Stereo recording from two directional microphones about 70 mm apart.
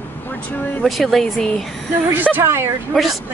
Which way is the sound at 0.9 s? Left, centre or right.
Centre.